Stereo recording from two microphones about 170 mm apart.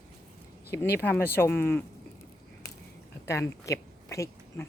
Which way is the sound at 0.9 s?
10° left (ahead or behind).